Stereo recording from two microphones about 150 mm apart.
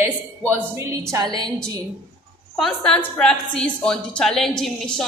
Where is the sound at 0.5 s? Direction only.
20° right (ahead or behind).